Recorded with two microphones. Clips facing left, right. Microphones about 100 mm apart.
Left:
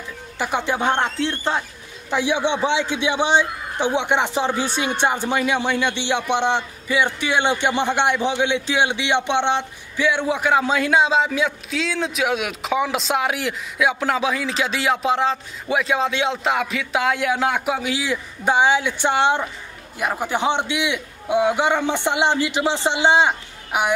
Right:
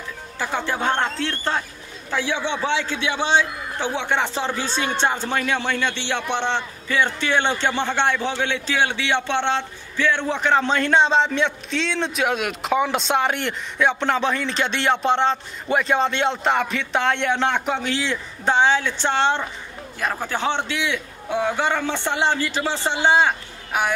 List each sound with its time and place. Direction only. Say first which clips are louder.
0.4 s a man's voice: left 2 dB; 15° left (ahead or behind)